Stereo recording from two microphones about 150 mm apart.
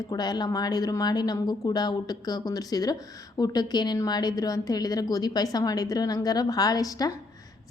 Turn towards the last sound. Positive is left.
turn(degrees=25)  # may be behind; listen again after turning